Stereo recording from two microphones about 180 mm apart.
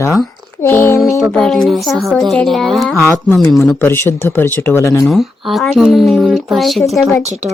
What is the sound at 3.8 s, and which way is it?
A woman's voice, 10° left (ahead or behind).